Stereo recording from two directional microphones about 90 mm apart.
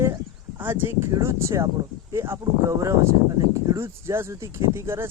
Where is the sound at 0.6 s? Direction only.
25° right (ahead or behind).